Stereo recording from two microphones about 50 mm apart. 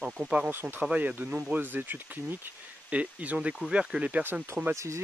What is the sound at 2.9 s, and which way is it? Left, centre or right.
Speech, right.